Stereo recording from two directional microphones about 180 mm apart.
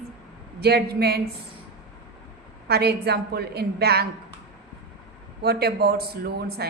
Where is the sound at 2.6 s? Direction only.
60° right (ahead or behind).